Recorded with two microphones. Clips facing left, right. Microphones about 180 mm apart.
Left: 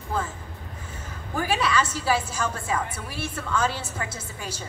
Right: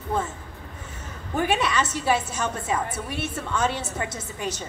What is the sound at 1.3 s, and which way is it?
A woman's voice, 25° right (ahead or behind).